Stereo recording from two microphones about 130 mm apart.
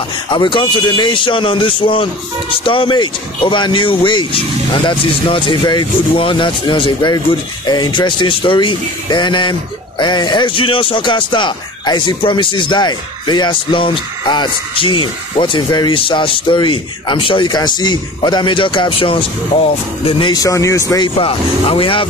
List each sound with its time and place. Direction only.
0.3 s speech: 40° left (ahead or behind)
20.2 s speech: 25° left (ahead or behind)
21.0 s speech: 45° left (ahead or behind)